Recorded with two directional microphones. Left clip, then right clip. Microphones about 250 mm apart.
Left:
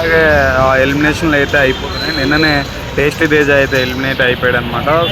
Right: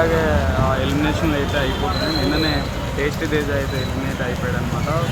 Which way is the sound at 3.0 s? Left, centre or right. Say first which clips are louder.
Left 11 dB; centre.